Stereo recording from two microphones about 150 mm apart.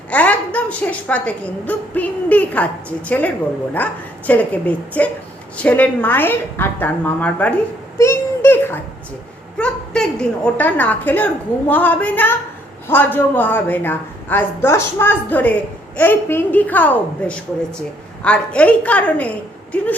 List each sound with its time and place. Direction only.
0.1 s a woman's voice: 10° left (ahead or behind)
7.9 s a sound: 15° left (ahead or behind)
9.6 s a woman's voice: 5° left (ahead or behind)